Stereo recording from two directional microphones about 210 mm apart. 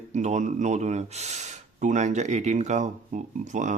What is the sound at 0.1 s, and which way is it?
Speech, 35° right (ahead or behind).